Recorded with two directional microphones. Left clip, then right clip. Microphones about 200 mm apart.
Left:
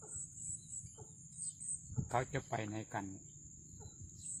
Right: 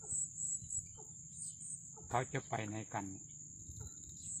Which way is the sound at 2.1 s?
5° left (ahead or behind).